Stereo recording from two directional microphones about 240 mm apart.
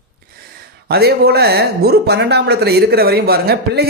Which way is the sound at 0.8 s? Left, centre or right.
Right.